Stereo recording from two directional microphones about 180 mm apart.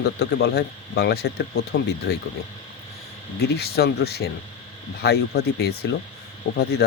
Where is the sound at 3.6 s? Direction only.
60° left (ahead or behind).